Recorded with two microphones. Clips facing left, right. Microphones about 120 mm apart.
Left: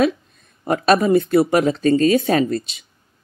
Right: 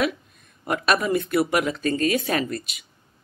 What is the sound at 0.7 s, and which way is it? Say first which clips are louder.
Speech: left 7 dB; 30° left (ahead or behind).